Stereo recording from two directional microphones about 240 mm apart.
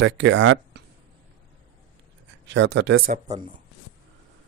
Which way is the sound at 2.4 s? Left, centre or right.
Right.